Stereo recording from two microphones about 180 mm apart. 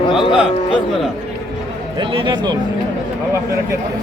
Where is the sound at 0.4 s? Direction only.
30° left (ahead or behind).